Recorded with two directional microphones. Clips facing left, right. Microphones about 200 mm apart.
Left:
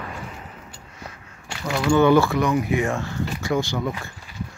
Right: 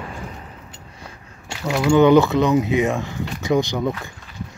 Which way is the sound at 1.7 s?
20° right (ahead or behind).